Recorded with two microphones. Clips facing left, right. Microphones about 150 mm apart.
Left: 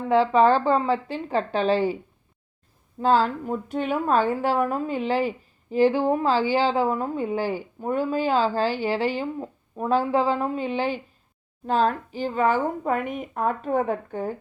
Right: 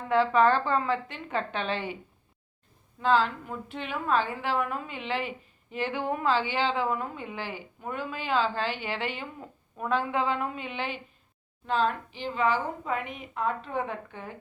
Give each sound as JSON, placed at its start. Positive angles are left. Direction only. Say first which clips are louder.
{"t": 0.1, "sound": "speech", "louder": "left 4 dB", "side_deg": 30}
{"t": 3.0, "sound": "speech", "louder": "left 4 dB", "side_deg": 40}